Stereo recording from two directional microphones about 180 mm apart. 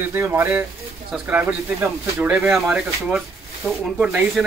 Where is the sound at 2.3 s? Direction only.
Centre (ahead or behind).